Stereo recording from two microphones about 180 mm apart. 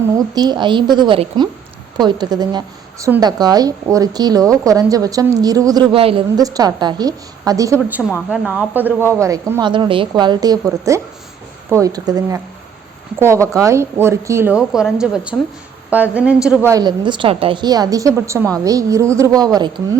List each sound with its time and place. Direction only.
0.1 s a woman's voice: 20° right (ahead or behind)
16.6 s a woman's voice: 20° right (ahead or behind)